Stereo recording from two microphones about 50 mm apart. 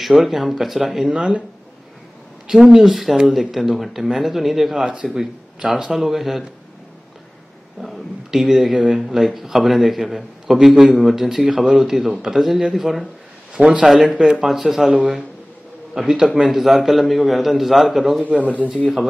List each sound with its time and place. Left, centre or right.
0.0 s speech: centre
2.7 s speech: centre
7.8 s speech: centre
12.4 s speech: centre
13.6 s speech: centre
18.2 s speech: right